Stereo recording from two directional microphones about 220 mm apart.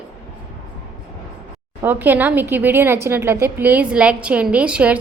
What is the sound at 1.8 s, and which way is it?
Speech, 10° right (ahead or behind).